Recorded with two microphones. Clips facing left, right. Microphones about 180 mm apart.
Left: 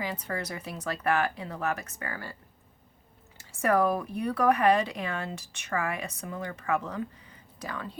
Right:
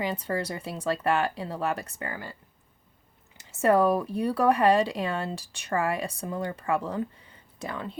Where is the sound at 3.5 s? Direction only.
25° right (ahead or behind).